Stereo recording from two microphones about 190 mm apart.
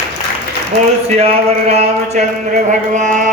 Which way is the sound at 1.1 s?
30° right (ahead or behind).